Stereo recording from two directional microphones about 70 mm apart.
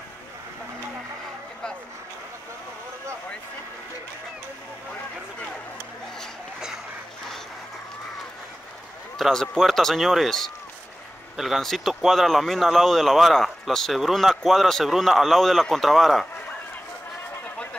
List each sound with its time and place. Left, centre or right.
9.2 s speech: centre